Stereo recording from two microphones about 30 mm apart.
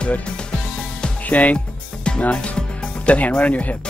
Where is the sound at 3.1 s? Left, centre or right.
Left.